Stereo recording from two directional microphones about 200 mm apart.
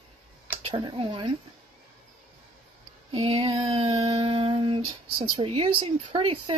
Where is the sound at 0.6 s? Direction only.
25° right (ahead or behind).